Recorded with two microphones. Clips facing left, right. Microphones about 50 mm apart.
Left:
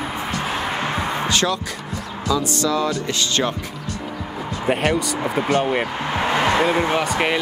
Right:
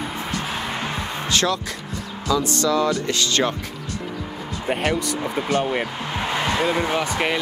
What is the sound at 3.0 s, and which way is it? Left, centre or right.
Speech, left.